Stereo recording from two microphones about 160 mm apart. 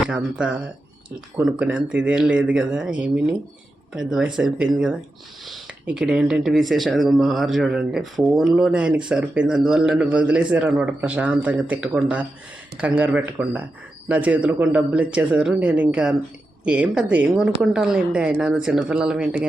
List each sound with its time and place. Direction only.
0.0 s speech: 5° right (ahead or behind)